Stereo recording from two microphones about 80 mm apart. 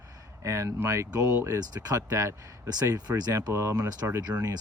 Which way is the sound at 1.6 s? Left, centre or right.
Right.